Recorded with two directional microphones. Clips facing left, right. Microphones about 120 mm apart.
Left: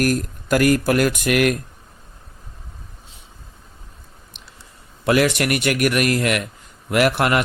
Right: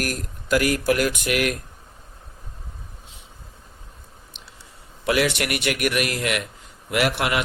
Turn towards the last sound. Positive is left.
turn(degrees=50)  # may be behind; listen again after turning